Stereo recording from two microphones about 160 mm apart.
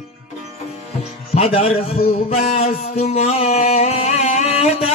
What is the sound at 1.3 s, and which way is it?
A man's voice, 40° left (ahead or behind).